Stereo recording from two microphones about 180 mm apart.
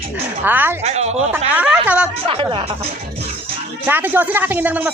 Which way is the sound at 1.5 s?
5° right (ahead or behind).